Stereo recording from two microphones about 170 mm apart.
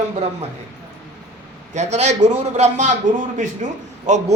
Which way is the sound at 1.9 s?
40° right (ahead or behind).